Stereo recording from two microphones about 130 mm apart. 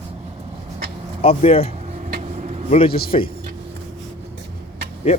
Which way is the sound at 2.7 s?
45° left (ahead or behind).